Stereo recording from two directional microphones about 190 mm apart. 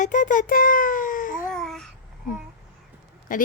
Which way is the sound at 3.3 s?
45° left (ahead or behind).